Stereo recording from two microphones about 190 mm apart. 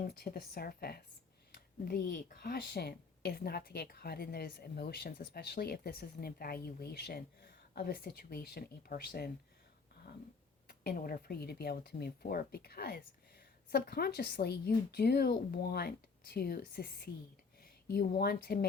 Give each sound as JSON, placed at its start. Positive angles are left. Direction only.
{"t": 0.0, "sound": "speech", "side_deg": 50}
{"t": 10.7, "sound": "speech", "side_deg": 55}